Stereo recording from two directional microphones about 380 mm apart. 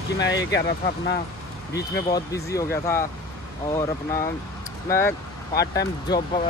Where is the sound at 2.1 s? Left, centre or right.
Centre.